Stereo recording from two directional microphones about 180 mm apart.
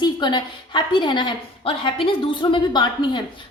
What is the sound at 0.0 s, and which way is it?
A woman's voice, 25° left (ahead or behind).